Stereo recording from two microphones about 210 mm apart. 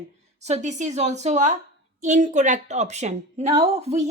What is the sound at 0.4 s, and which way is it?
A woman's voice, 35° right (ahead or behind).